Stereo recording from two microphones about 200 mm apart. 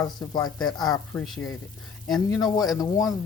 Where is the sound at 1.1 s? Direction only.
Centre (ahead or behind).